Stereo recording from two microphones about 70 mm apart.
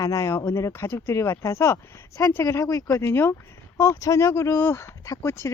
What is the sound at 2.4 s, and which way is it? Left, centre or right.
Speech, left.